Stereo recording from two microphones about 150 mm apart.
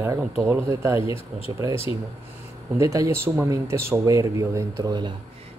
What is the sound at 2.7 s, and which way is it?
Speech, 20° right (ahead or behind).